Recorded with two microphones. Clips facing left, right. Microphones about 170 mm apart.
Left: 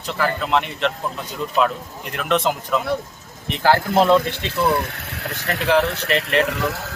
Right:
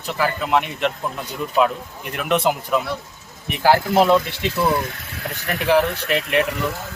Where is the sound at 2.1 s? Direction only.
15° right (ahead or behind).